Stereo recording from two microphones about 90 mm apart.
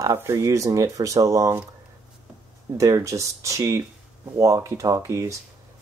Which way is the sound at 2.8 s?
35° right (ahead or behind).